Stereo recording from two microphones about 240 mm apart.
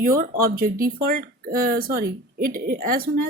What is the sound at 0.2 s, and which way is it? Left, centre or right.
Speech, right.